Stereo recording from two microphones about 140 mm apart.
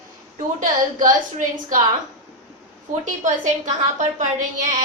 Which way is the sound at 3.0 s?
65° right (ahead or behind).